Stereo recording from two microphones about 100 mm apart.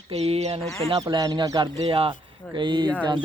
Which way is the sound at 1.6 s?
55° right (ahead or behind).